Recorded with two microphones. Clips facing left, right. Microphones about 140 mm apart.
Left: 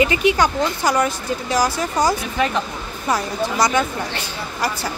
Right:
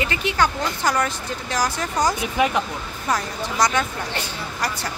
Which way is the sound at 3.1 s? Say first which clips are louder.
Left 4 dB; 5° left (ahead or behind).